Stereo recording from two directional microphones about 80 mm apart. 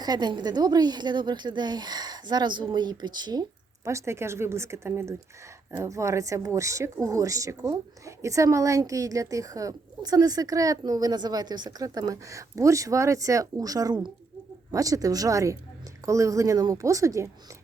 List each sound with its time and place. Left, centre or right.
0.0 s speech: right
3.8 s a woman's voice: right